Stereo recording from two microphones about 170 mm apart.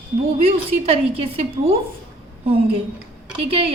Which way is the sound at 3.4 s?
35° right (ahead or behind).